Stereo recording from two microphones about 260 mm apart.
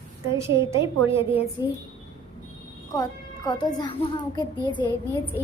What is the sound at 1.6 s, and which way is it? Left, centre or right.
Speech, centre.